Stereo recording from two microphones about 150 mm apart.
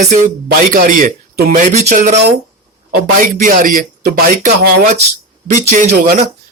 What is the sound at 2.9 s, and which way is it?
A man's voice, 60° right (ahead or behind).